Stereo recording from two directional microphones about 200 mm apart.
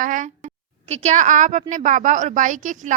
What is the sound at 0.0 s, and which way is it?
A woman's voice, 40° right (ahead or behind).